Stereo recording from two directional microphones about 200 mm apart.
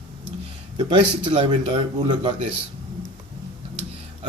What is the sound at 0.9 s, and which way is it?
Speech, 25° right (ahead or behind).